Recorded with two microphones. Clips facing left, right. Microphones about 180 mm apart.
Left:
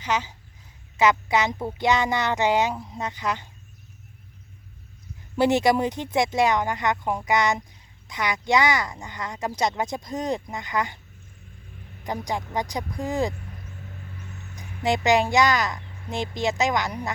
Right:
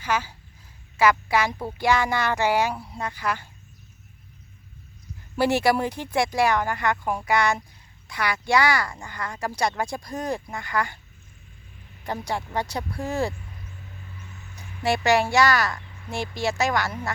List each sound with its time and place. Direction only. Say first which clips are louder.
0.0 s speech: even; 20° left (ahead or behind)
5.4 s speech: left 1 dB; 20° left (ahead or behind)
12.0 s a woman's voice: even; 15° left (ahead or behind)
14.1 s a sound: left 3 dB; 45° left (ahead or behind)
14.8 s a woman's voice: even; 15° left (ahead or behind)